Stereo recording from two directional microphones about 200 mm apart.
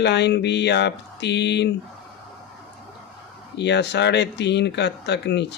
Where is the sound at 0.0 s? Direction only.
60° left (ahead or behind).